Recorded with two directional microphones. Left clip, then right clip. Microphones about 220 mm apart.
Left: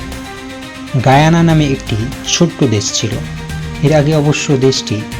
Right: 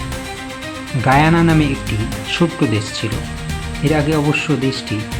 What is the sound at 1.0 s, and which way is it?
Speech, 30° left (ahead or behind).